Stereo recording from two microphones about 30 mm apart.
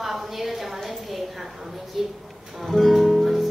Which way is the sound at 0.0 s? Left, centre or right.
Centre.